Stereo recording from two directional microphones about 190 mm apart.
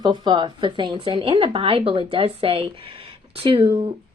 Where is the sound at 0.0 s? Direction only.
25° right (ahead or behind).